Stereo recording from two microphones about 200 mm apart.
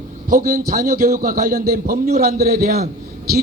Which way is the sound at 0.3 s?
45° right (ahead or behind).